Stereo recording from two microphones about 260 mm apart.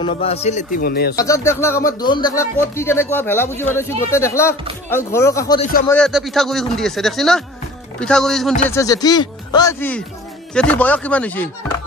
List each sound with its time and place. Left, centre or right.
0.0 s a man's voice: left
1.1 s speech: centre
8.6 s speech: centre